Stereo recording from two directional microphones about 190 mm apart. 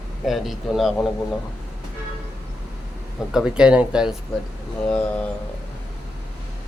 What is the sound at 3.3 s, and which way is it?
Speech, 5° right (ahead or behind).